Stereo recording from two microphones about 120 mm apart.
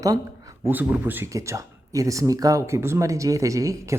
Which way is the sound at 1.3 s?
25° right (ahead or behind).